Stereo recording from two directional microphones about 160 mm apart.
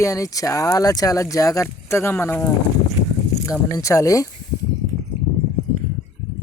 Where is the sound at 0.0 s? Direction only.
20° left (ahead or behind).